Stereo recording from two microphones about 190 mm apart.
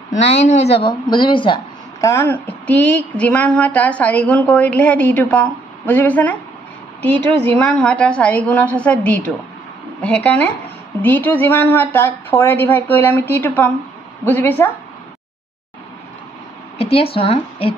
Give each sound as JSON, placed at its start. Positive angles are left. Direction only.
{"t": 0.1, "sound": "speech", "side_deg": 35}
{"t": 16.7, "sound": "speech", "side_deg": 30}